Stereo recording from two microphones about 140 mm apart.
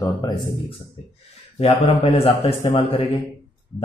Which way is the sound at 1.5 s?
50° left (ahead or behind).